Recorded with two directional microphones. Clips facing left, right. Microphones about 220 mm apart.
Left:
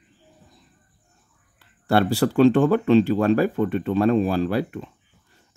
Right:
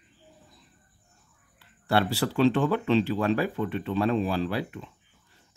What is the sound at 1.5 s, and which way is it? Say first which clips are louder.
Speech: left 5 dB; 45° left (ahead or behind).